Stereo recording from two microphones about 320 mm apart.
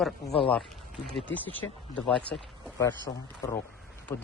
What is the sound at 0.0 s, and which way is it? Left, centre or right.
A man's voice, centre.